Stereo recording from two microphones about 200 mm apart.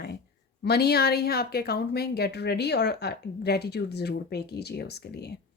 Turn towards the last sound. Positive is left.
turn(degrees=55)  # may be behind; listen again after turning